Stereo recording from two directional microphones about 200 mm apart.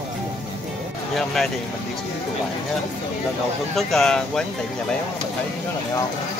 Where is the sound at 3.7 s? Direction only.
Centre (ahead or behind).